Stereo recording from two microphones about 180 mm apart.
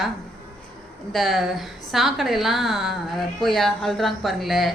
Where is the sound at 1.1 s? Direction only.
Centre (ahead or behind).